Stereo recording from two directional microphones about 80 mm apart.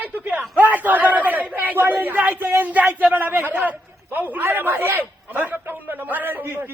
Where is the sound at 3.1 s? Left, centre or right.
Right.